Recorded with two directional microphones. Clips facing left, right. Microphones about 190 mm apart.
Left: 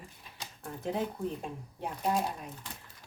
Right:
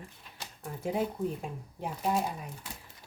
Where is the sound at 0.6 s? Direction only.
5° right (ahead or behind).